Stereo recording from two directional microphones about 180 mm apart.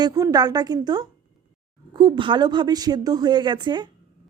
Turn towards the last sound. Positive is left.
turn(degrees=-25)  # may be behind; listen again after turning